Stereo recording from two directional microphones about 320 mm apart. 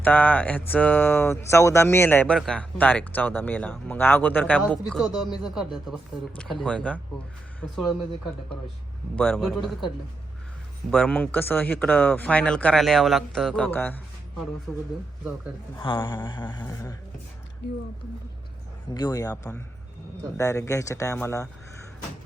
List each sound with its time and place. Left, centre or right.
0.0 s speech: centre
10.9 s speech: centre
15.7 s speech: centre
18.9 s speech: centre